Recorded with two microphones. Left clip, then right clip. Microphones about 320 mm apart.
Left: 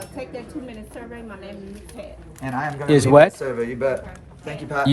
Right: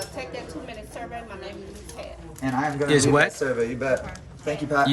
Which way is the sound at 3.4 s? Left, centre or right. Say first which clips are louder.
Left 1 dB; left.